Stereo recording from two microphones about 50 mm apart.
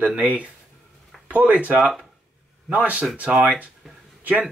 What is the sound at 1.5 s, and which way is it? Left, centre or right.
Speech, right.